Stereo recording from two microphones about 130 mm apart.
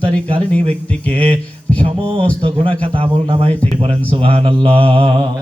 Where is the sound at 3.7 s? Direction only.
45° right (ahead or behind).